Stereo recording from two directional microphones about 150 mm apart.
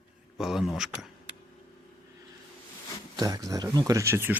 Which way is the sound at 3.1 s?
25° right (ahead or behind).